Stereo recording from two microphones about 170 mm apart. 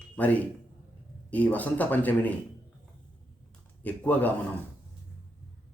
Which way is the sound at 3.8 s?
10° left (ahead or behind).